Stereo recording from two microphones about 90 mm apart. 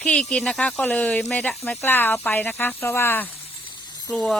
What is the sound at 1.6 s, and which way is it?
Speech, 25° left (ahead or behind).